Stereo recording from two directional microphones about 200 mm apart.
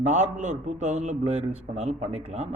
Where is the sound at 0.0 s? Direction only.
35° right (ahead or behind).